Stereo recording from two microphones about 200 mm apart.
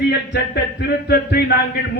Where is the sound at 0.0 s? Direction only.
55° left (ahead or behind).